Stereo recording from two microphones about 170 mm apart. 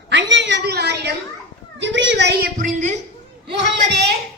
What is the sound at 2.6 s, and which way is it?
Speech, 45° right (ahead or behind).